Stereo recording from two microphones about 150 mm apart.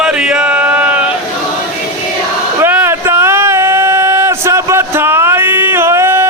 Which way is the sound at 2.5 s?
15° right (ahead or behind).